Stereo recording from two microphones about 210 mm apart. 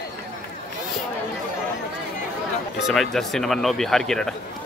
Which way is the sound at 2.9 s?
Centre (ahead or behind).